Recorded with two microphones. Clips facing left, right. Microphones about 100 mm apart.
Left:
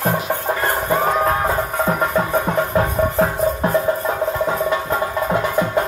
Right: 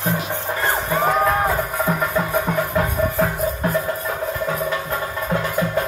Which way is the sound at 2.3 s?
25° left (ahead or behind).